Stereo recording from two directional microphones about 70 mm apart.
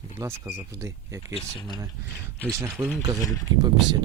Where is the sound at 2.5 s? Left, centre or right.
Right.